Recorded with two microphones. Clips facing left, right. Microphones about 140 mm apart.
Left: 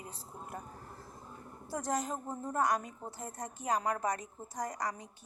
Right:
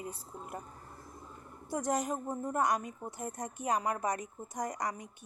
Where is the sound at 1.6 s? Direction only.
15° right (ahead or behind).